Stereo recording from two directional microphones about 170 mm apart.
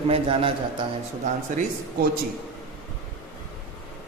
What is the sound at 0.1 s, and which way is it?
Speech, 30° right (ahead or behind).